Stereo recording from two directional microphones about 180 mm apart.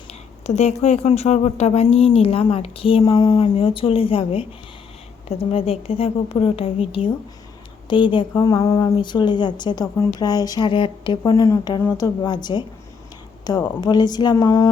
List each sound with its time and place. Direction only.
0.1 s a woman's voice: 40° left (ahead or behind); by 14.7 s 20° left (ahead or behind)